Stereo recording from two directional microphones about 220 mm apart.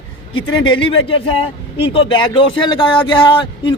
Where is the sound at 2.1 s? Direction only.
20° left (ahead or behind).